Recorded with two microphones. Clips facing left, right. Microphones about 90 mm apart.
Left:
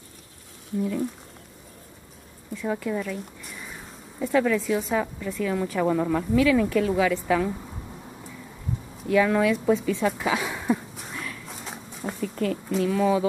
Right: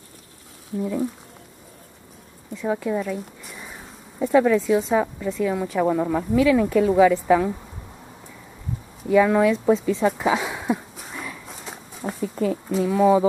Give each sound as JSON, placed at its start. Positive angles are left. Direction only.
{"t": 0.7, "sound": "speech", "side_deg": -10}
{"t": 2.6, "sound": "speech", "side_deg": -10}
{"t": 4.7, "sound": "speech", "side_deg": -20}
{"t": 9.0, "sound": "speech", "side_deg": -10}
{"t": 9.7, "sound": "speech", "side_deg": -20}
{"t": 10.4, "sound": "a sound", "side_deg": -5}
{"t": 11.4, "sound": "speech", "side_deg": 0}